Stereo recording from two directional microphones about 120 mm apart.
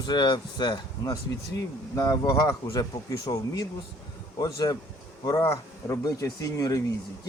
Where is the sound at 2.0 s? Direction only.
25° left (ahead or behind).